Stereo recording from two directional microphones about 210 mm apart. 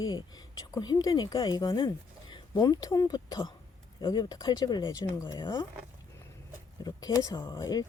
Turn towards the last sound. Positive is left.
turn(degrees=15)  # may be behind; listen again after turning